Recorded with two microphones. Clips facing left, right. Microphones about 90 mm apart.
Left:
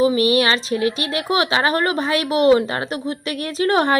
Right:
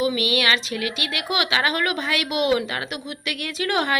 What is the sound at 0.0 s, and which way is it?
A woman's voice, 35° left (ahead or behind).